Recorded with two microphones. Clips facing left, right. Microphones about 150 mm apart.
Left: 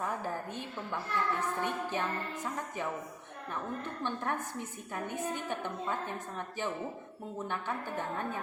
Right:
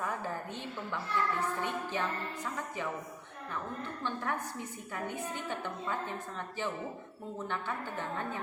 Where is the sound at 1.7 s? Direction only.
15° left (ahead or behind).